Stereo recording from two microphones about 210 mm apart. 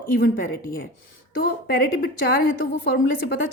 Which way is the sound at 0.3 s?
65° left (ahead or behind).